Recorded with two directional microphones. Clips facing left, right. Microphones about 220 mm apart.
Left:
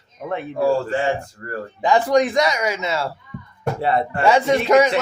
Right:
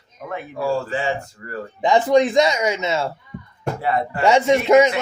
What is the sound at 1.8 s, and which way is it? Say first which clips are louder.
Speech: right 1 dB; 20° right (ahead or behind).